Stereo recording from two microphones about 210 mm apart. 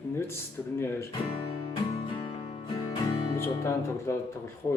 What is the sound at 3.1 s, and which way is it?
Music, 25° left (ahead or behind).